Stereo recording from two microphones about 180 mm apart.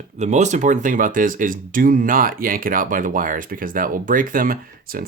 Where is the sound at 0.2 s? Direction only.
40° right (ahead or behind).